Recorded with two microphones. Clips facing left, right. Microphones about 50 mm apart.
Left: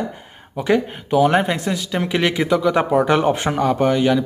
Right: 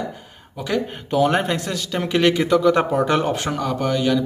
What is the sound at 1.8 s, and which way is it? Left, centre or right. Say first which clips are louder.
Speech: right 1 dB; centre.